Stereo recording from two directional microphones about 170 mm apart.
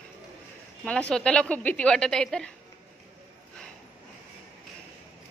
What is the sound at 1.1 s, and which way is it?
A woman's voice, 5° left (ahead or behind).